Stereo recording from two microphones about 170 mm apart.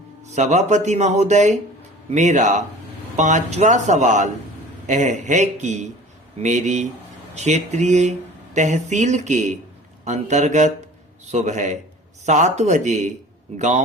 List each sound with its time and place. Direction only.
0.3 s speech: 40° right (ahead or behind)